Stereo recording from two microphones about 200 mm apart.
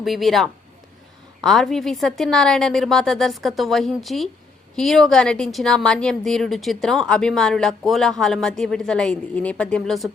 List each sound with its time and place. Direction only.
0.0 s a woman's voice: centre (ahead or behind)